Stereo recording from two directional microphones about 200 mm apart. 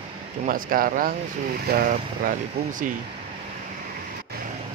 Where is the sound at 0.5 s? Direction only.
45° right (ahead or behind).